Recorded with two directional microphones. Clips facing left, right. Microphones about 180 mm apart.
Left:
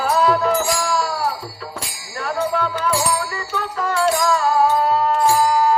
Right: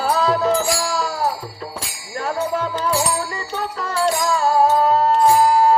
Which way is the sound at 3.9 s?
30° right (ahead or behind).